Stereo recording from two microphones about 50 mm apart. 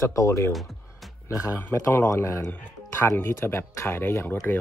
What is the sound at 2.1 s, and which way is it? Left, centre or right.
Speech, left.